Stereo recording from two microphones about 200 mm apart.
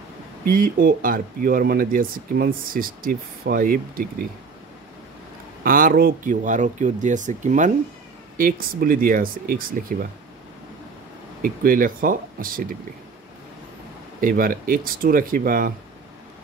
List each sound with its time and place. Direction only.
0.5 s speech: 45° right (ahead or behind)
5.6 s speech: 45° right (ahead or behind)
11.4 s speech: 45° right (ahead or behind)
14.2 s speech: 45° right (ahead or behind)